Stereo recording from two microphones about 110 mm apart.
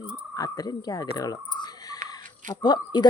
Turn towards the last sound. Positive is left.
turn(degrees=40)  # may be behind; listen again after turning